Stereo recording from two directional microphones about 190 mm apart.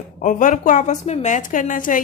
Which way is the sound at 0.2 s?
45° left (ahead or behind).